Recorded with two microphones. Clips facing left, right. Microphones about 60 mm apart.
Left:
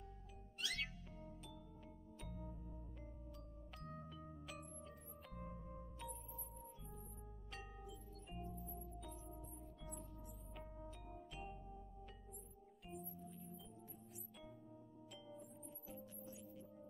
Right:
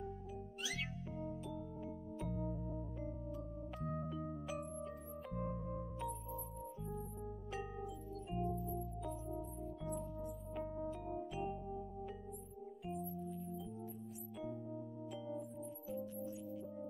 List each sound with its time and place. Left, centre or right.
0.6 s cat: centre
2.1 s music: centre
3.8 s music: centre
5.5 s music: right
5.9 s music: centre
7.5 s music: centre
10.9 s music: centre
12.8 s music: centre
15.9 s music: centre